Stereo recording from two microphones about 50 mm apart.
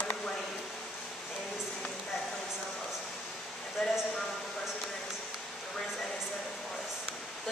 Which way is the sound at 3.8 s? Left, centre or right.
Centre.